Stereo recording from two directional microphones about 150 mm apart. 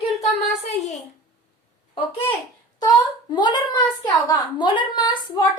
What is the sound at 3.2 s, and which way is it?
A woman's voice, 30° left (ahead or behind).